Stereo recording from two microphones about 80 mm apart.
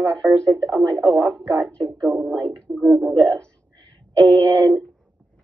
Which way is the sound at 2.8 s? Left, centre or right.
Centre.